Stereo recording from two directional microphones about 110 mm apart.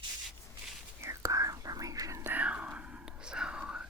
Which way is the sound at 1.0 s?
25° right (ahead or behind).